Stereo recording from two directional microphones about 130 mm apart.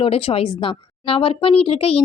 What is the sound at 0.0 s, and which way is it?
Speech, 50° left (ahead or behind).